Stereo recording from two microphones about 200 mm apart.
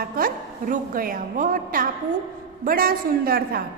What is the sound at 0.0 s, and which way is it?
A woman's voice, 45° right (ahead or behind).